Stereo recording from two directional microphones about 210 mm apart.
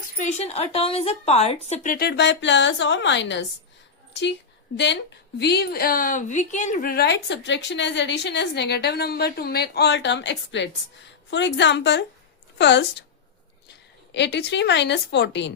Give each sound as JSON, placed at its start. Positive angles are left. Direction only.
{"t": 0.2, "sound": "a woman's voice", "side_deg": 30}
{"t": 5.4, "sound": "a woman's voice", "side_deg": 50}
{"t": 14.1, "sound": "a woman's voice", "side_deg": 55}